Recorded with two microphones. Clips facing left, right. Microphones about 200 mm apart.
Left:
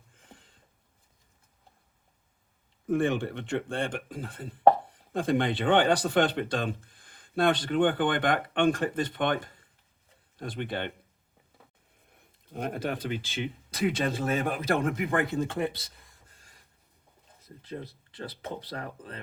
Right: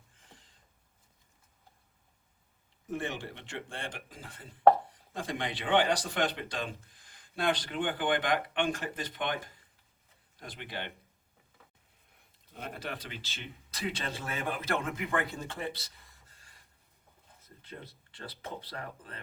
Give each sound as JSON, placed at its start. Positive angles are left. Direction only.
{"t": 2.9, "sound": "speech", "side_deg": 55}
{"t": 12.5, "sound": "speech", "side_deg": 50}
{"t": 17.7, "sound": "speech", "side_deg": 15}